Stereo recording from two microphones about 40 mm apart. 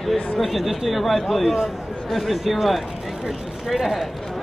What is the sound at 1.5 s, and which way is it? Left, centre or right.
Speech, centre.